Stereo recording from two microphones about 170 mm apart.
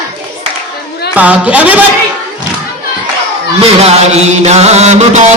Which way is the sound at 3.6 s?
40° right (ahead or behind).